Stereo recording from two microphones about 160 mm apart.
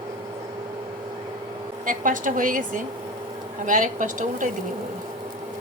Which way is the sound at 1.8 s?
55° right (ahead or behind).